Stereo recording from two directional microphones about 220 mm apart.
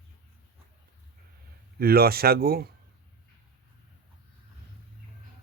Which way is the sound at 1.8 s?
45° right (ahead or behind).